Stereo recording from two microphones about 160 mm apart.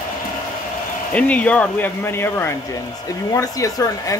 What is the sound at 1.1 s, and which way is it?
Speech, 10° left (ahead or behind).